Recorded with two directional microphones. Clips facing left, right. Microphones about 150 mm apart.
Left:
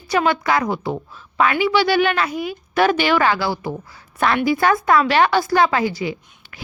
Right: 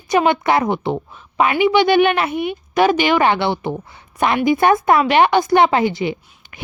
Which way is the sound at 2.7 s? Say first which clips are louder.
Right 2 dB; 15° right (ahead or behind).